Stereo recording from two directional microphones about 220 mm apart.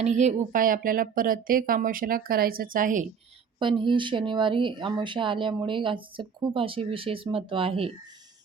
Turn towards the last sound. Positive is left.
turn(degrees=-25)  # may be behind; listen again after turning